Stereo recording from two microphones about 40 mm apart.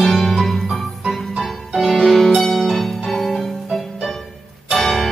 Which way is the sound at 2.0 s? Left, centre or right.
Centre.